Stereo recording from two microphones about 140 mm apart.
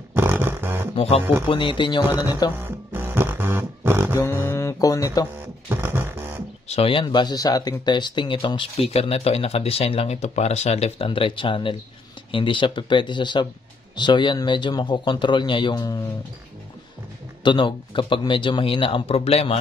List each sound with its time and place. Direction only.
0.1 s a sound: 15° right (ahead or behind)
1.5 s speech: 35° left (ahead or behind)
2.6 s music: 15° right (ahead or behind)
4.2 s mantra: 15° left (ahead or behind)
5.7 s beatboxing: 15° right (ahead or behind)
6.7 s speech: 40° left (ahead or behind)
17.4 s speech: 35° left (ahead or behind)